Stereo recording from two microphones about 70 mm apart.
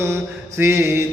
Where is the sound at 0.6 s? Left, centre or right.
Right.